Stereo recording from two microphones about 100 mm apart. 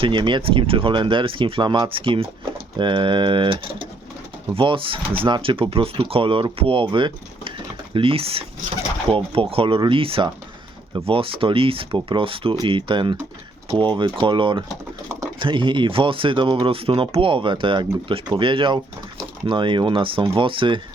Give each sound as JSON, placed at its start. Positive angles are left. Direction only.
{"t": 0.0, "sound": "speech", "side_deg": -55}
{"t": 7.9, "sound": "speech", "side_deg": -65}